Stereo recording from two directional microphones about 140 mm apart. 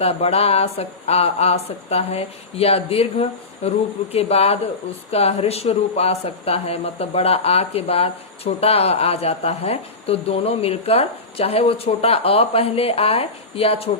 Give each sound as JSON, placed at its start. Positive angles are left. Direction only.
{"t": 0.0, "sound": "speech", "side_deg": 45}